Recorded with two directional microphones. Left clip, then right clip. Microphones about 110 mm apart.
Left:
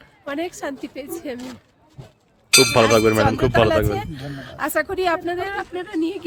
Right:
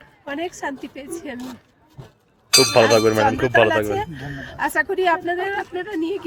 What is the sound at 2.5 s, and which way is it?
Speech, 40° left (ahead or behind).